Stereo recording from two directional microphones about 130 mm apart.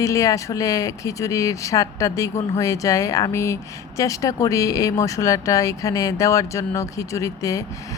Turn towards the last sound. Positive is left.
turn(degrees=25)  # may be behind; listen again after turning